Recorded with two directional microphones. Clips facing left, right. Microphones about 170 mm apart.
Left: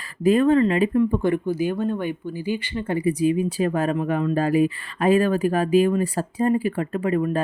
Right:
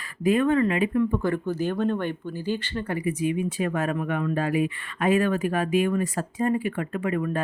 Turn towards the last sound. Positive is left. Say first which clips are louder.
# left 4 dB
turn(degrees=30)  # may be behind; listen again after turning